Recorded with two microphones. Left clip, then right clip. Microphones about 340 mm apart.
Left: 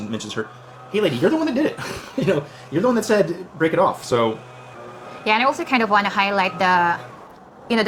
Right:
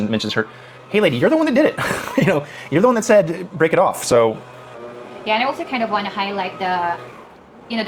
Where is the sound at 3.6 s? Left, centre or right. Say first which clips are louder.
Right 3 dB; right.